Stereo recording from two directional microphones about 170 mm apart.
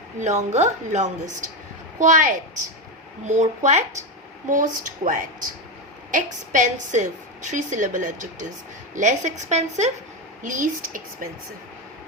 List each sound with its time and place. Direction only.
0.2 s a woman's voice: 45° right (ahead or behind)